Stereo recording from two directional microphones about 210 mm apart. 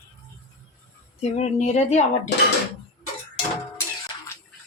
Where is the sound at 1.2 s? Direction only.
30° left (ahead or behind).